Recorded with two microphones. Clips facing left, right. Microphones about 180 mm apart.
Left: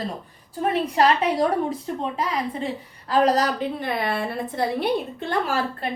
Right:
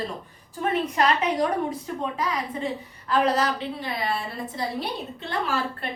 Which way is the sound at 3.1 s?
40° left (ahead or behind).